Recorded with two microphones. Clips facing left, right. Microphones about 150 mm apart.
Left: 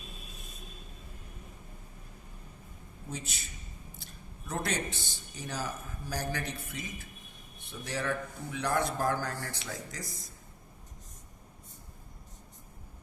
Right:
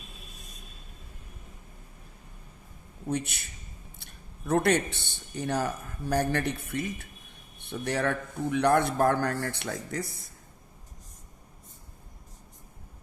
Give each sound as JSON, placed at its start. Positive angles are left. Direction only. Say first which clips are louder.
{"t": 3.1, "sound": "a man's voice", "louder": "right 10 dB", "side_deg": -65}